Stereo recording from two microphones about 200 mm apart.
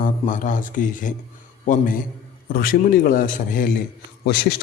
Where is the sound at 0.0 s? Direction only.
40° left (ahead or behind).